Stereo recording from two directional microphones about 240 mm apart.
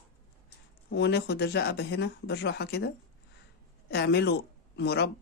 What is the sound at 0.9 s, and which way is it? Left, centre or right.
Speech, left.